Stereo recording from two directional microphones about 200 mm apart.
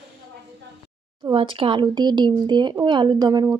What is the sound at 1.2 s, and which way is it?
Speech, 25° right (ahead or behind).